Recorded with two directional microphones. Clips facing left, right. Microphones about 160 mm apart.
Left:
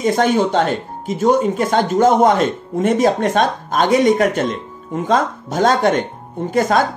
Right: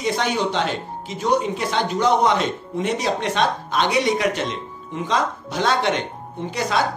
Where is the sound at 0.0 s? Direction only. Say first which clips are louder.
Left 7 dB; 50° left (ahead or behind).